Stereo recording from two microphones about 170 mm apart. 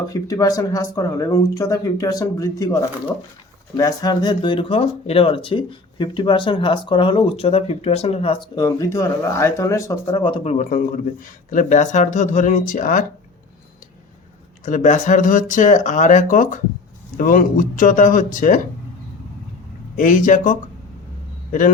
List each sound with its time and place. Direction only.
0.1 s speech: 20° left (ahead or behind)
3.8 s speech: 20° left (ahead or behind)
10.4 s speech: 45° left (ahead or behind)
14.6 s speech: 45° left (ahead or behind)
20.0 s speech: 50° left (ahead or behind)